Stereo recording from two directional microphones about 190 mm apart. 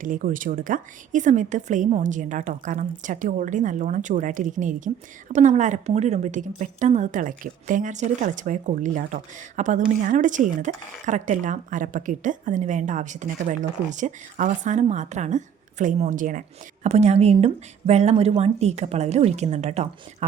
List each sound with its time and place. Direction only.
0.0 s speech: 45° right (ahead or behind)